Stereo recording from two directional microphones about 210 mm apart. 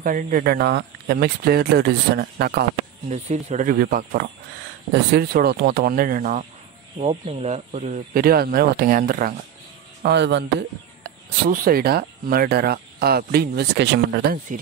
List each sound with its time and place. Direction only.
0.0 s speech: 40° right (ahead or behind)
3.1 s speech: 35° right (ahead or behind)
7.0 s speech: 30° right (ahead or behind)
10.0 s speech: 55° right (ahead or behind)
11.1 s speech: 45° right (ahead or behind)